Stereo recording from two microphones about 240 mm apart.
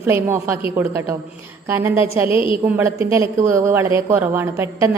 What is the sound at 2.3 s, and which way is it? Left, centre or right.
Speech, left.